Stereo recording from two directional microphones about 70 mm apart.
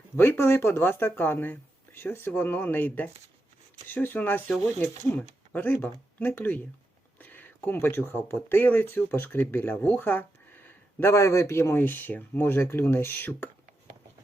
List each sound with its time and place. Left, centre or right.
0.2 s speech: left
11.1 s speech: left